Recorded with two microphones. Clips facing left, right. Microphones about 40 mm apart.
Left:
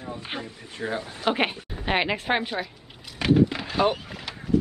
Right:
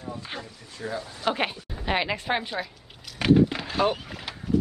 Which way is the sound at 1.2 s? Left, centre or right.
Centre.